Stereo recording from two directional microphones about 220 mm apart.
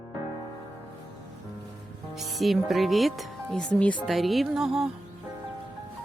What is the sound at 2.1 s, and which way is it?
Speech, centre (ahead or behind).